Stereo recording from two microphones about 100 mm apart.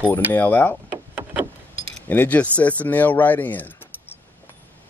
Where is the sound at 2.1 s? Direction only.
15° left (ahead or behind).